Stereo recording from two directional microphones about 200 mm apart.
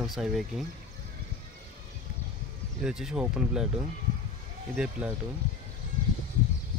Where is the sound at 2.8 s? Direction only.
5° right (ahead or behind).